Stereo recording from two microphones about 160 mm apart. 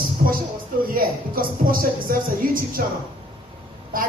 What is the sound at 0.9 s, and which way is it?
Speech, 65° right (ahead or behind).